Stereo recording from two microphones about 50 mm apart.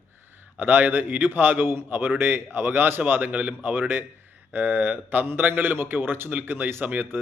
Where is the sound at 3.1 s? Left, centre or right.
Right.